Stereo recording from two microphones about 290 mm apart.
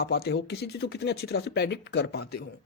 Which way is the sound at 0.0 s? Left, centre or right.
Left.